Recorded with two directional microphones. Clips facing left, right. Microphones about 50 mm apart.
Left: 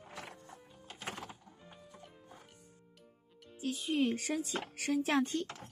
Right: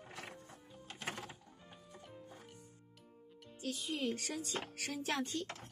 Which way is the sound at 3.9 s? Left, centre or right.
Left.